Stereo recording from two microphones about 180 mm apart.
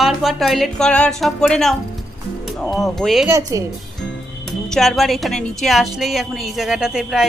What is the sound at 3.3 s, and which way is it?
Speech, 20° right (ahead or behind).